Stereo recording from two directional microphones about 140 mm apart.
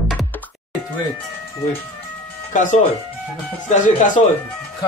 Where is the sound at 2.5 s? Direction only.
65° left (ahead or behind).